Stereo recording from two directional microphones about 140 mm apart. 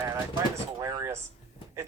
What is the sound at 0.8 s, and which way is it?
Speech, 20° right (ahead or behind).